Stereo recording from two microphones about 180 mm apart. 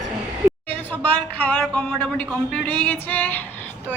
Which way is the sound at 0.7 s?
10° left (ahead or behind).